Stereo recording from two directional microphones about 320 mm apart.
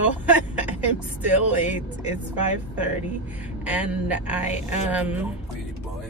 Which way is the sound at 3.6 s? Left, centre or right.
Centre.